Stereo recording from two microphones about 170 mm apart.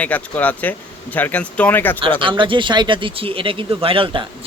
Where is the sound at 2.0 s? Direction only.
30° right (ahead or behind).